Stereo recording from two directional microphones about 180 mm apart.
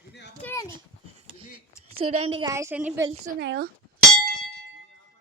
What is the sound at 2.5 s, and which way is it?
Speech, 15° right (ahead or behind).